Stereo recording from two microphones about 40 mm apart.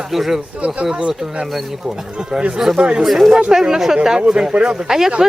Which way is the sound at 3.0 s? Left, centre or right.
Centre.